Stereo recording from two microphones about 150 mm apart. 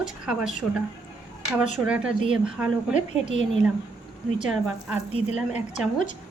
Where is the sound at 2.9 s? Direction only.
50° left (ahead or behind).